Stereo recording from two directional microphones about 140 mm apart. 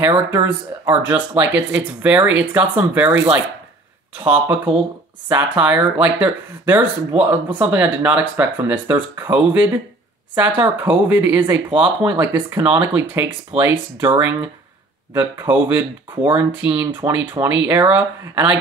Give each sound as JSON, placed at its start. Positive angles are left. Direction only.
{"t": 0.3, "sound": "speech", "side_deg": -15}
{"t": 13.5, "sound": "speech", "side_deg": -45}
{"t": 15.1, "sound": "speech", "side_deg": -15}